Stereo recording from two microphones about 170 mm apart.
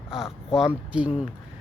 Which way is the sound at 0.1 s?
5° right (ahead or behind).